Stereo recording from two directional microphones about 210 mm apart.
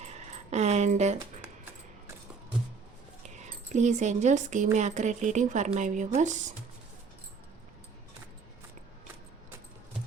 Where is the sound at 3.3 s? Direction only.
35° right (ahead or behind).